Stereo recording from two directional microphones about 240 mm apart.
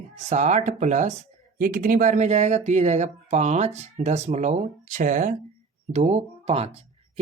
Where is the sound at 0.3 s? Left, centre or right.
Right.